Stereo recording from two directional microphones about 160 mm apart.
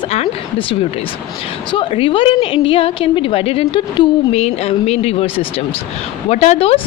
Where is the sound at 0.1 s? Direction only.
40° left (ahead or behind).